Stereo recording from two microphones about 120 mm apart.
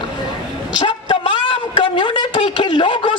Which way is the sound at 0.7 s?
45° left (ahead or behind).